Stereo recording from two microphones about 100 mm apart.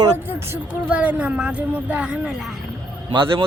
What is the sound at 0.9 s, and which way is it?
Speech, 15° right (ahead or behind).